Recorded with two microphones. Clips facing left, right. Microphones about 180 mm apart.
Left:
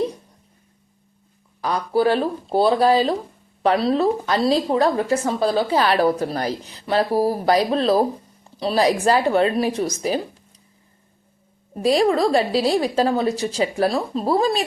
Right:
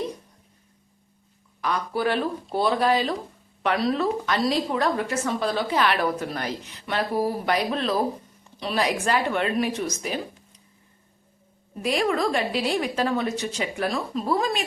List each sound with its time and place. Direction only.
1.6 s speech: 30° left (ahead or behind)
11.7 s speech: 35° left (ahead or behind)